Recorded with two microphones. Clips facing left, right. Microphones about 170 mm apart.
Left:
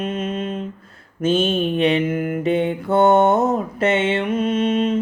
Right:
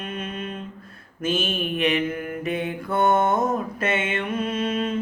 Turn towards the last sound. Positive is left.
turn(degrees=20)  # may be behind; listen again after turning